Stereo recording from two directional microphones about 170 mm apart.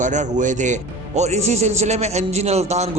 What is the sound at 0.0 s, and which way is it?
A man's voice, 45° right (ahead or behind).